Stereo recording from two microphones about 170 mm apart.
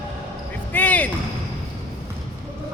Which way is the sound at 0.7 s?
10° left (ahead or behind).